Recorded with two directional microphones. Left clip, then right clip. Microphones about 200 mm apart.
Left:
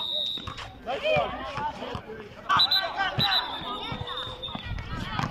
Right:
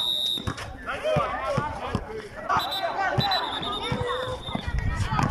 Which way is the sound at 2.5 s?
30° right (ahead or behind).